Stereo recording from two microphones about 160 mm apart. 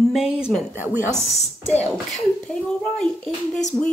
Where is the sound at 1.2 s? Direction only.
40° left (ahead or behind).